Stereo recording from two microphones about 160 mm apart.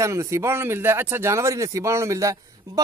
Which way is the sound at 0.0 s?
20° right (ahead or behind).